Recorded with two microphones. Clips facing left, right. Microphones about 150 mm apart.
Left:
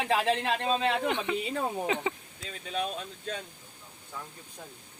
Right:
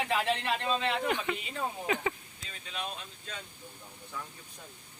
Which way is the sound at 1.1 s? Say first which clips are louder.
Left 3 dB; 20° left (ahead or behind).